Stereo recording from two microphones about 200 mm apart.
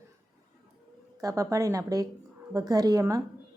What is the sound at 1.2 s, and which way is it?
A woman's voice, 15° right (ahead or behind).